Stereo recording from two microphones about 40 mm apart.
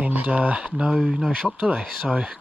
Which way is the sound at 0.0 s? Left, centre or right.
Right.